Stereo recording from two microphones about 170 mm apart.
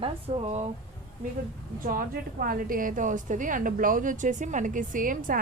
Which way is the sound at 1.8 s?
55° right (ahead or behind).